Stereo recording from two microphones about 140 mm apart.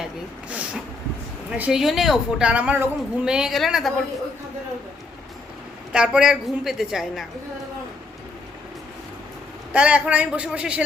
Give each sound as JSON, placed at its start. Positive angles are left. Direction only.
{"t": 1.5, "sound": "a woman's voice", "side_deg": -10}
{"t": 5.9, "sound": "a woman's voice", "side_deg": -5}
{"t": 9.7, "sound": "a man's voice", "side_deg": -10}